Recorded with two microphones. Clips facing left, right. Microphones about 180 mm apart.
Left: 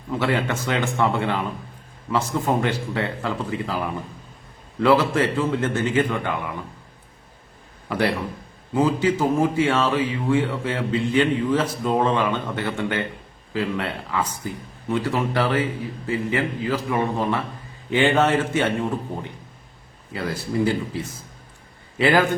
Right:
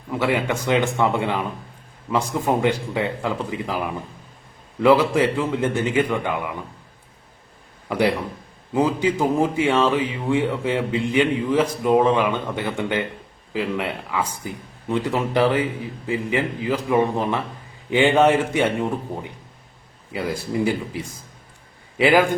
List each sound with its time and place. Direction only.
0.1 s speech: 15° right (ahead or behind)
7.9 s a man's voice: 15° right (ahead or behind)